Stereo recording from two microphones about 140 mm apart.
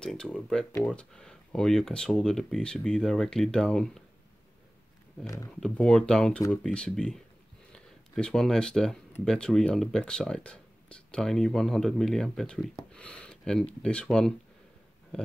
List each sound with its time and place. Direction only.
0.0 s speech: 5° left (ahead or behind)
5.2 s speech: 25° left (ahead or behind)
5.6 s speech: 5° left (ahead or behind)
15.1 s a sound: 5° left (ahead or behind)